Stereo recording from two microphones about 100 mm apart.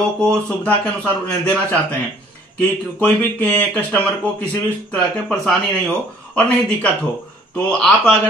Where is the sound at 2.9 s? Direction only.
15° left (ahead or behind).